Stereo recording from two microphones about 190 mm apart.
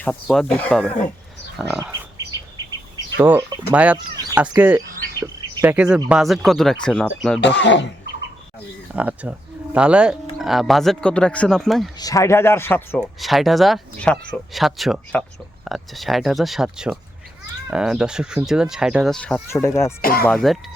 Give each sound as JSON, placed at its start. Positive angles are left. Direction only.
{"t": 0.0, "sound": "speech", "side_deg": 5}
{"t": 1.8, "sound": "a sound", "side_deg": -15}
{"t": 3.2, "sound": "speech", "side_deg": -10}
{"t": 3.9, "sound": "speech", "side_deg": -20}
{"t": 4.6, "sound": "speech", "side_deg": -10}
{"t": 7.4, "sound": "speech", "side_deg": 70}
{"t": 8.9, "sound": "speech", "side_deg": -10}
{"t": 11.9, "sound": "speech", "side_deg": 20}
{"t": 13.1, "sound": "speech", "side_deg": 0}
{"t": 20.0, "sound": "speech", "side_deg": 50}
{"t": 20.2, "sound": "speech", "side_deg": 5}